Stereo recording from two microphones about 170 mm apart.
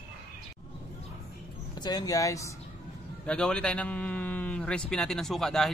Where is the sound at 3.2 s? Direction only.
5° left (ahead or behind).